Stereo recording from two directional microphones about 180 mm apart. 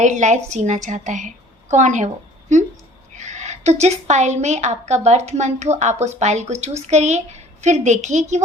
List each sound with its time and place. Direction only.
0.0 s a woman's voice: 40° right (ahead or behind)
3.2 s a woman's voice: 40° right (ahead or behind)